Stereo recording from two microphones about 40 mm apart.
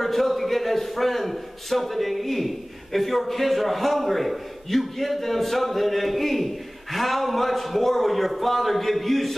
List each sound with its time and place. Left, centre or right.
0.0 s a man's voice: centre